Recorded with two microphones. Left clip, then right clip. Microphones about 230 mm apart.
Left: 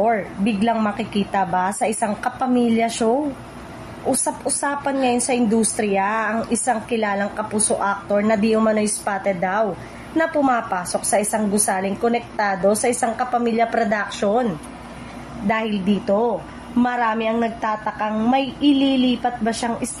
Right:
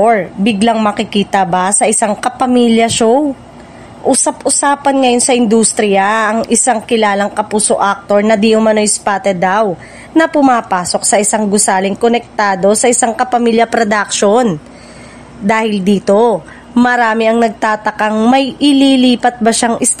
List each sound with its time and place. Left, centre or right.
0.0 s a woman's voice: right